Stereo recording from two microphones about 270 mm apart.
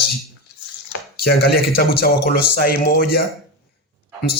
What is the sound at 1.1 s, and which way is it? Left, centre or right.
Speech, left.